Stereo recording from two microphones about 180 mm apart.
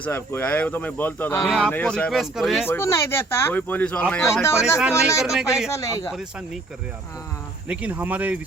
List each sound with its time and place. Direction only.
0.0 s speech: 10° left (ahead or behind)
1.5 s speech: centre (ahead or behind)
2.6 s speech: 15° left (ahead or behind)
4.8 s speech: 5° right (ahead or behind)
5.7 s speech: 15° left (ahead or behind)
6.1 s speech: centre (ahead or behind)
7.7 s speech: 10° right (ahead or behind)